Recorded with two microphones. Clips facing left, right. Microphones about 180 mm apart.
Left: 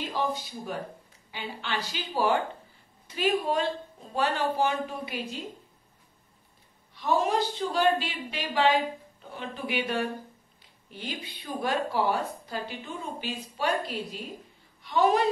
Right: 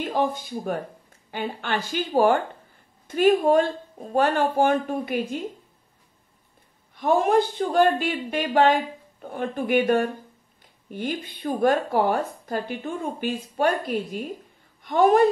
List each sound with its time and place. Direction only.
0.0 s speech: 50° right (ahead or behind)
6.9 s speech: 50° right (ahead or behind)